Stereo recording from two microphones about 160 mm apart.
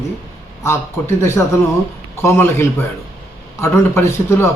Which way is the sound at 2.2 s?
15° left (ahead or behind).